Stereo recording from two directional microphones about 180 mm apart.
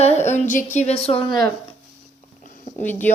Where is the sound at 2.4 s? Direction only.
50° left (ahead or behind).